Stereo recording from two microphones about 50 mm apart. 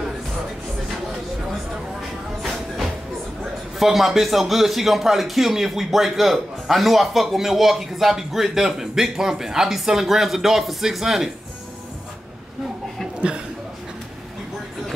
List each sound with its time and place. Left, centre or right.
3.8 s speech: centre
13.2 s speech: right